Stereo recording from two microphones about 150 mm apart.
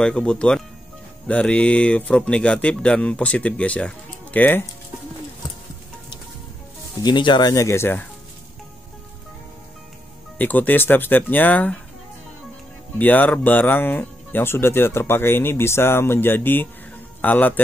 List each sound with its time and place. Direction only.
0.0 s speech: 5° left (ahead or behind)
7.0 s speech: 30° left (ahead or behind)
10.3 s speech: 10° left (ahead or behind)
13.0 s a man's voice: 10° left (ahead or behind)